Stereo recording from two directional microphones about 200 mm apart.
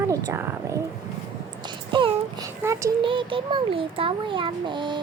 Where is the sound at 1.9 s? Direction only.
25° right (ahead or behind).